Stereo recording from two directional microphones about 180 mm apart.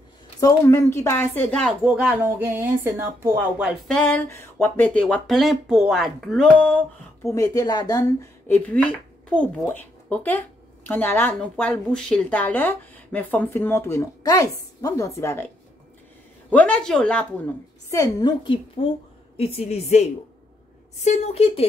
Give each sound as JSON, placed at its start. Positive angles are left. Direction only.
{"t": 0.4, "sound": "a woman's voice", "side_deg": 15}
{"t": 2.0, "sound": "speech", "side_deg": -10}
{"t": 3.9, "sound": "speech", "side_deg": 10}
{"t": 7.2, "sound": "a woman's voice", "side_deg": 20}
{"t": 17.8, "sound": "a woman's voice", "side_deg": 20}